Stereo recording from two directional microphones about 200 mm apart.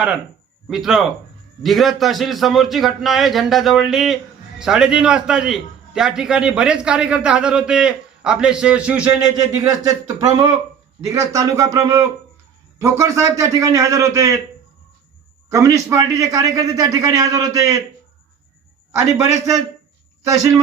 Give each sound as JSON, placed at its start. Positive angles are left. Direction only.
{"t": 0.7, "sound": "a man's voice", "side_deg": 0}
{"t": 10.2, "sound": "a man's voice", "side_deg": -20}
{"t": 15.4, "sound": "a man's voice", "side_deg": -15}
{"t": 18.9, "sound": "a man's voice", "side_deg": -15}